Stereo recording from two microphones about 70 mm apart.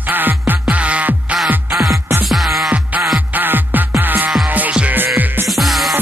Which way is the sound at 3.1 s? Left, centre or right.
Right.